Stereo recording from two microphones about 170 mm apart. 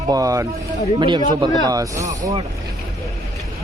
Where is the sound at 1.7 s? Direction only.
20° right (ahead or behind).